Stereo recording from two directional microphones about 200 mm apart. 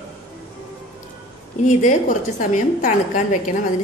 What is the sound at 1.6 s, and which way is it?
A woman's voice, 35° left (ahead or behind).